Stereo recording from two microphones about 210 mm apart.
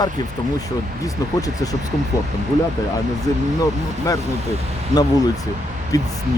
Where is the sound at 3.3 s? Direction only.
15° left (ahead or behind).